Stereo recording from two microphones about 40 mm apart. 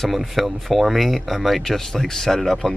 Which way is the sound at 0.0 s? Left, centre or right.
Centre.